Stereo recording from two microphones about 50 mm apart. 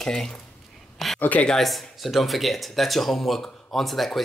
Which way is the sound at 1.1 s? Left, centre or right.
Left.